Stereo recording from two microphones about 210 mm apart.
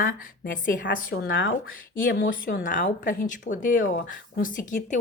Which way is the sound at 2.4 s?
40° left (ahead or behind).